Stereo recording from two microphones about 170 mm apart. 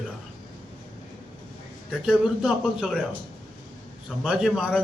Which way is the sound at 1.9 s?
5° right (ahead or behind).